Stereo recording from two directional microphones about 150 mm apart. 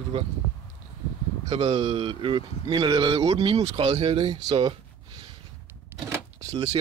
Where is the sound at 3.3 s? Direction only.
40° right (ahead or behind).